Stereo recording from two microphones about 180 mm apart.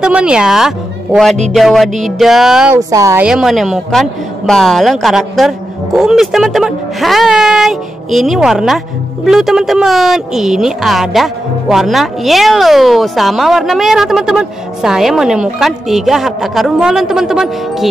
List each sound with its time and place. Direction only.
0.0 s speech: 5° right (ahead or behind)
2.9 s a woman's voice: 15° right (ahead or behind)
3.3 s speech: centre (ahead or behind)